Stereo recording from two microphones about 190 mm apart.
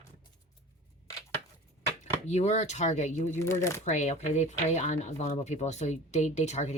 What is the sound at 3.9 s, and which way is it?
Speech, 35° left (ahead or behind).